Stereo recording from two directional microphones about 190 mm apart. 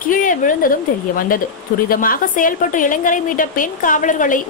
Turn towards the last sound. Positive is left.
turn(degrees=45)  # may be behind; listen again after turning